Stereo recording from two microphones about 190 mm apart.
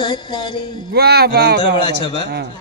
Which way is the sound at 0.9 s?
55° right (ahead or behind).